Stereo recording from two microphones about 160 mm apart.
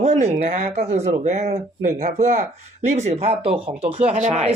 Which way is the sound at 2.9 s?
45° right (ahead or behind).